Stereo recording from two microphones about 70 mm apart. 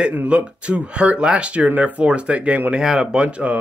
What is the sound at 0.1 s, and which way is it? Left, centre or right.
Speech, centre.